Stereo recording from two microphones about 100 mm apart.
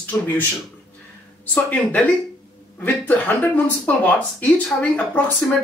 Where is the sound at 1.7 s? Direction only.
15° left (ahead or behind).